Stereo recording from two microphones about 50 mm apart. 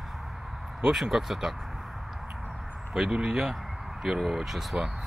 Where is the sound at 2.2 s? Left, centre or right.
Right.